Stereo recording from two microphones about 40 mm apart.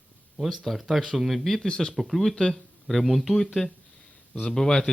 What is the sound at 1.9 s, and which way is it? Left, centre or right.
Speech, centre.